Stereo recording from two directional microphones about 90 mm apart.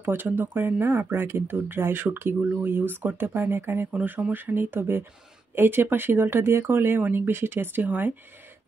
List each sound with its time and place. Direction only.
0.0 s speech: 25° right (ahead or behind)